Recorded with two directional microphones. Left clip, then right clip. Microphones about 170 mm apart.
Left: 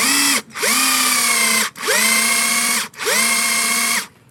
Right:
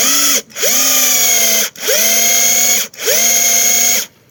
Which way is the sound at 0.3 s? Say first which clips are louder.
Right 3 dB; 5° left (ahead or behind).